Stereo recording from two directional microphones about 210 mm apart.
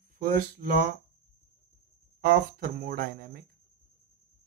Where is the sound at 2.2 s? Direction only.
45° right (ahead or behind).